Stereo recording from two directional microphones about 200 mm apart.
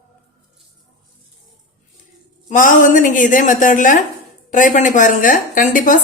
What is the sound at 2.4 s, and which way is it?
A woman's voice, 40° left (ahead or behind).